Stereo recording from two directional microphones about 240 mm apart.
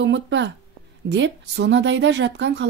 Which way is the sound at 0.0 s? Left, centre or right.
Right.